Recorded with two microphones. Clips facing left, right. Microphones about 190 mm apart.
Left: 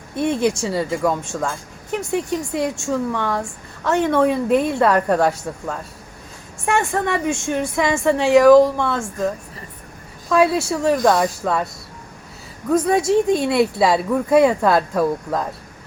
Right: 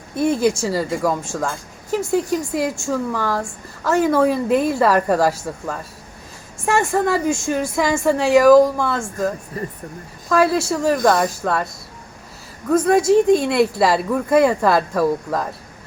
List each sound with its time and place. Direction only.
0.2 s speech: 5° right (ahead or behind)
9.5 s speech: 50° right (ahead or behind)
10.2 s speech: centre (ahead or behind)